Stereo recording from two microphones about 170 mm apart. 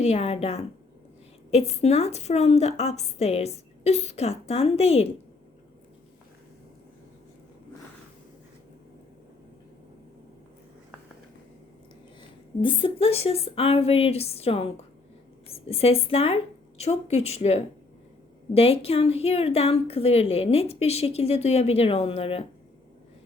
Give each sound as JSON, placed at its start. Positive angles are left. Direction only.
{"t": 0.0, "sound": "a woman's voice", "side_deg": 40}
{"t": 12.6, "sound": "a woman's voice", "side_deg": 30}